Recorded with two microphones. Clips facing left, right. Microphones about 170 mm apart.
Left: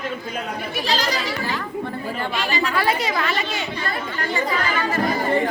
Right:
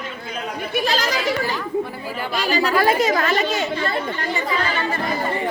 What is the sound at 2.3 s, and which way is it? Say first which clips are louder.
A woman's voice: right 6 dB; 40° right (ahead or behind).